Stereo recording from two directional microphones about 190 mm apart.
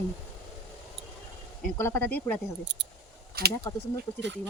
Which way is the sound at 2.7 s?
65° right (ahead or behind).